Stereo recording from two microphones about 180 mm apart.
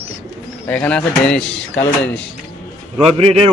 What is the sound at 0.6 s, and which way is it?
Speech, 10° left (ahead or behind).